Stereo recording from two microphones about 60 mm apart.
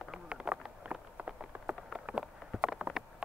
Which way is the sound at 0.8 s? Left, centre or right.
Right.